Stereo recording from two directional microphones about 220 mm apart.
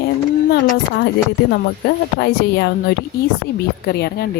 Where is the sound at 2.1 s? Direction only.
50° left (ahead or behind).